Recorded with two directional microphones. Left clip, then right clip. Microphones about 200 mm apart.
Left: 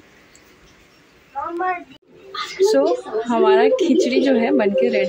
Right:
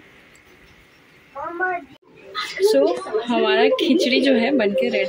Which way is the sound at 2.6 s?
Centre (ahead or behind).